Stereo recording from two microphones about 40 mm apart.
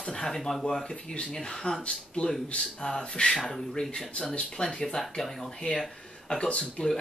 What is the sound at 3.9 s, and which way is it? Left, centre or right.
Speech, left.